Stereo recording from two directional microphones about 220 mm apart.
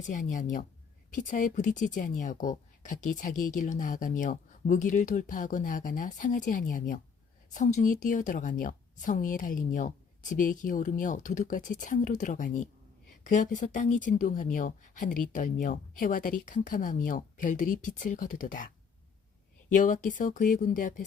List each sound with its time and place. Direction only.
0.0 s speech: 35° left (ahead or behind)
19.7 s speech: 35° left (ahead or behind)